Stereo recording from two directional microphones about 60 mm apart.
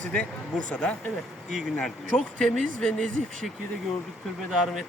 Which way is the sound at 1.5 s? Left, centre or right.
Centre.